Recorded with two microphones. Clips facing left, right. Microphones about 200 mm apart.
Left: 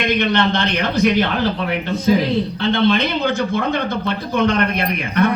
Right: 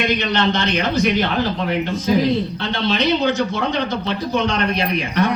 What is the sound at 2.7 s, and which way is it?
Speech, 55° left (ahead or behind).